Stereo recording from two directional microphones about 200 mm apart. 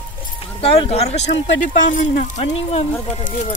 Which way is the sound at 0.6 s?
30° left (ahead or behind).